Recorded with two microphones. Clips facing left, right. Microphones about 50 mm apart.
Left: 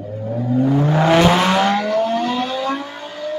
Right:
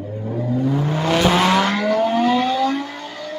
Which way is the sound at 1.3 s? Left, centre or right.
Centre.